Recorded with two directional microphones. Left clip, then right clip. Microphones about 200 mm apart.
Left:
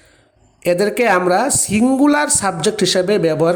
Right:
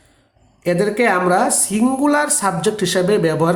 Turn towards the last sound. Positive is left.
turn(degrees=25)  # may be behind; listen again after turning